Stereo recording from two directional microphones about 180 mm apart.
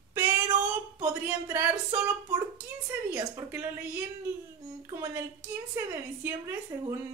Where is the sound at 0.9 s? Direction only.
15° right (ahead or behind).